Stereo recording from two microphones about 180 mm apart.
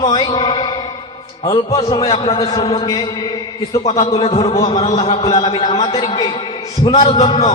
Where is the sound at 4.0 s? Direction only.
35° left (ahead or behind).